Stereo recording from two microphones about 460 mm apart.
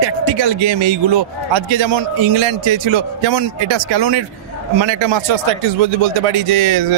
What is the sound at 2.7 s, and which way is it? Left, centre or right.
A man's voice, right.